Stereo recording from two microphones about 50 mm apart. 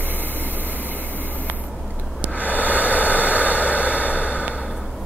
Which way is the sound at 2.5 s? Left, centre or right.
Right.